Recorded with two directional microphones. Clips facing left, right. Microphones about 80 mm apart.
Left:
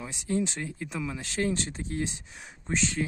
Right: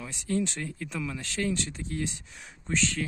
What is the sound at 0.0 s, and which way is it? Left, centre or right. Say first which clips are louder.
Speech: even; centre.